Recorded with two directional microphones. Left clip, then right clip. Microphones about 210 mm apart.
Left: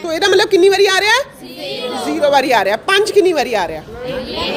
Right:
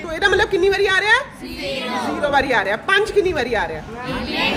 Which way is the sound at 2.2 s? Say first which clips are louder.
Left 6 dB; 35° left (ahead or behind).